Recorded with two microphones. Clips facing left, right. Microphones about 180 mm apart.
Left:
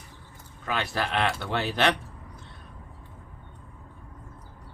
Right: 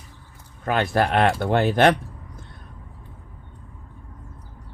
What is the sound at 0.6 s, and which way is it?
Speech, 50° right (ahead or behind).